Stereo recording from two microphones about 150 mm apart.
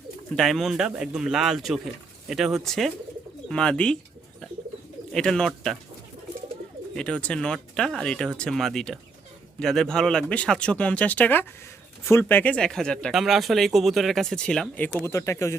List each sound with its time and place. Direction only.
0.3 s speech: centre (ahead or behind)
5.1 s speech: 5° left (ahead or behind)
6.9 s speech: 5° left (ahead or behind)
15.0 s speech: 20° left (ahead or behind)